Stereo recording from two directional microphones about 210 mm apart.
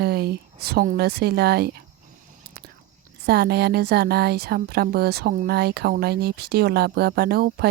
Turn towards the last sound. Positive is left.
turn(degrees=-50)  # may be behind; listen again after turning